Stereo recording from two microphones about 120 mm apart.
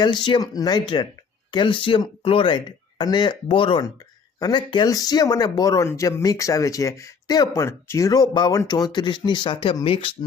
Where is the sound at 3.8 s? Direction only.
30° left (ahead or behind).